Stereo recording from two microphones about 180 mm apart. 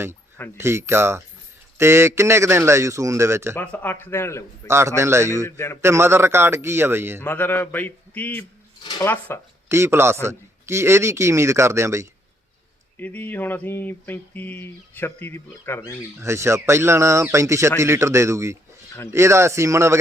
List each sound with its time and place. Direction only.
0.5 s speech: 15° right (ahead or behind)
3.6 s speech: 10° left (ahead or behind)
4.9 s speech: 15° right (ahead or behind)
5.5 s speech: 15° left (ahead or behind)
5.8 s speech: 15° right (ahead or behind)
7.2 s speech: 10° left (ahead or behind)
9.6 s speech: 15° right (ahead or behind)
13.0 s speech: 10° left (ahead or behind)
16.2 s speech: 15° right (ahead or behind)